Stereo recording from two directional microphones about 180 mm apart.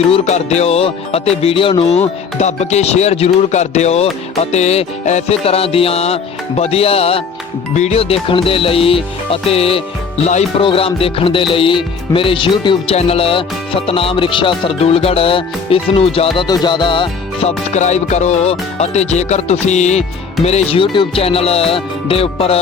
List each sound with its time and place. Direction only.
0.1 s music: 40° left (ahead or behind)
17.7 s music: 40° left (ahead or behind)